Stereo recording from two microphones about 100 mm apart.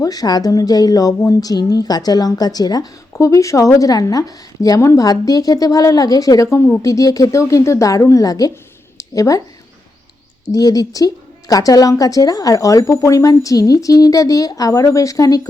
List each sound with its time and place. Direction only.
0.0 s a woman's voice: 40° left (ahead or behind)
9.0 s a sound: 35° left (ahead or behind)
10.5 s a woman's voice: 40° left (ahead or behind)